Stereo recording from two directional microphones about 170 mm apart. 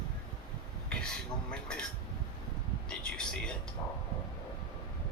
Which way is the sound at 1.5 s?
5° left (ahead or behind).